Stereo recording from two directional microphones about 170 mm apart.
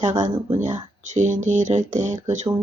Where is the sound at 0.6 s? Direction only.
45° right (ahead or behind).